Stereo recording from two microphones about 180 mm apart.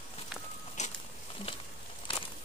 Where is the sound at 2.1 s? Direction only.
30° left (ahead or behind).